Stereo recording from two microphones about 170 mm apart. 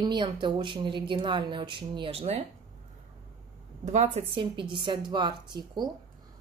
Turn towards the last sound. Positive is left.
turn(degrees=-25)  # may be behind; listen again after turning